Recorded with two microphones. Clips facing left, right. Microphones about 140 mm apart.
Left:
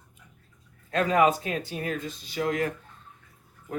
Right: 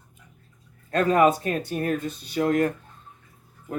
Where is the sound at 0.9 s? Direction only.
45° right (ahead or behind).